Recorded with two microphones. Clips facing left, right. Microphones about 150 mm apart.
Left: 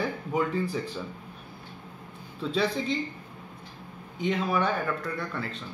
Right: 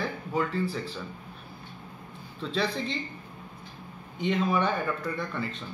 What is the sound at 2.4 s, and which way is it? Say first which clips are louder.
Speech: left 2 dB; 10° left (ahead or behind).